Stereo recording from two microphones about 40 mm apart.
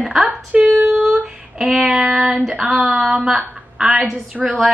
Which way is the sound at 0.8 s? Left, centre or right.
Right.